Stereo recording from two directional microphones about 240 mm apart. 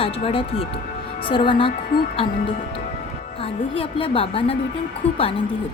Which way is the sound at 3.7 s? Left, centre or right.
Left.